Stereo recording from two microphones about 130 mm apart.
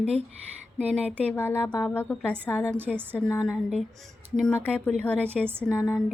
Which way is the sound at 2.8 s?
15° right (ahead or behind).